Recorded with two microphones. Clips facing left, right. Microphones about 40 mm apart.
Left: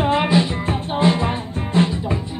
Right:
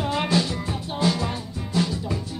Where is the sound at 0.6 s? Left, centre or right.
Left.